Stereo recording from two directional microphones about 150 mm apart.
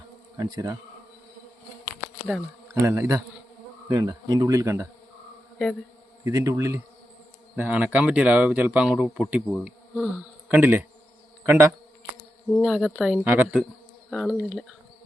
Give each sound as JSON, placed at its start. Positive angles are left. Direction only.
{"t": 0.3, "sound": "speech", "side_deg": -25}
{"t": 2.6, "sound": "speech", "side_deg": -20}
{"t": 6.3, "sound": "speech", "side_deg": -20}
{"t": 12.5, "sound": "speech", "side_deg": 0}
{"t": 13.1, "sound": "speech", "side_deg": -10}